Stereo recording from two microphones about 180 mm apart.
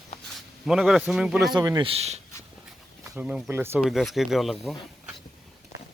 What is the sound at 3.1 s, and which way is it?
Speech, 5° right (ahead or behind).